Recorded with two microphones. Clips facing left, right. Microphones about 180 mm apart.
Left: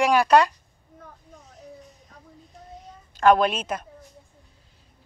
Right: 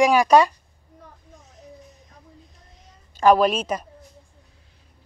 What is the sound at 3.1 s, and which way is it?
Speech, 10° right (ahead or behind).